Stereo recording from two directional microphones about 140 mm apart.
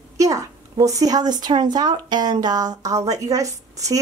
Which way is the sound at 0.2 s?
25° right (ahead or behind).